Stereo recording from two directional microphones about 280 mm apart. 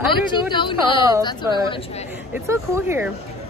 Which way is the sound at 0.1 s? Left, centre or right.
Centre.